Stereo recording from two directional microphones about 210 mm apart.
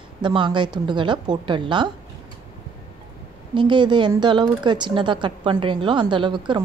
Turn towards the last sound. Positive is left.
turn(degrees=-20)  # may be behind; listen again after turning